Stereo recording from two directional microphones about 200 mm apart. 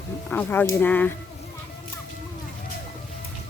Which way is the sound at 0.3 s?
10° left (ahead or behind).